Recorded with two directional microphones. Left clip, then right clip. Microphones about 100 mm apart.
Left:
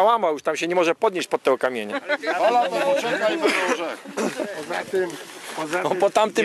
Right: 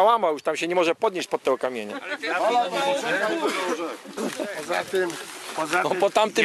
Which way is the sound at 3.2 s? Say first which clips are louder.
Left 4 dB; 15° left (ahead or behind).